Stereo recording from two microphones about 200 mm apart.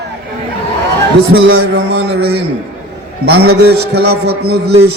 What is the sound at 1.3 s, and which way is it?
Speech, 90° right.